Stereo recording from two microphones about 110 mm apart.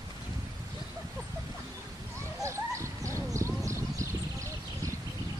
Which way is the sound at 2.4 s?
25° right (ahead or behind).